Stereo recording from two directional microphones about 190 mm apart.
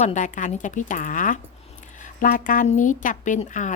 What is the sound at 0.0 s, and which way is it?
A woman's voice, 40° left (ahead or behind).